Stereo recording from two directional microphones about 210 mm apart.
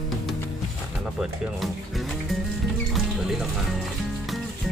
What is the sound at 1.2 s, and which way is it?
Music, centre (ahead or behind).